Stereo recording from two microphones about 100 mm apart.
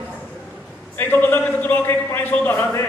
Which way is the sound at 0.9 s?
20° left (ahead or behind).